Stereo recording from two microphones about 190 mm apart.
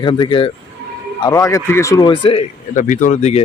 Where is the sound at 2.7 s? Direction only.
45° left (ahead or behind).